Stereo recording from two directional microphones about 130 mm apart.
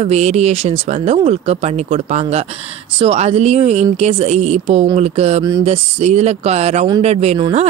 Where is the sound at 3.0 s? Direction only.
50° right (ahead or behind).